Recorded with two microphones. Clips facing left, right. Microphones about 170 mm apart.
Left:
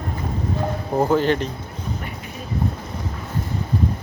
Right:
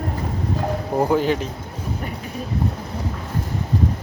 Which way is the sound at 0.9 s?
10° right (ahead or behind).